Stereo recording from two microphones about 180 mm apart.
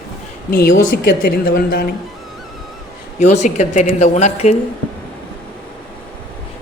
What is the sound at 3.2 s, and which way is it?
A woman's voice, 40° left (ahead or behind).